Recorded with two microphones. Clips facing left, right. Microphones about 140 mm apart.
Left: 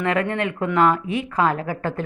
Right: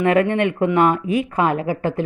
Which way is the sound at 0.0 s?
20° right (ahead or behind).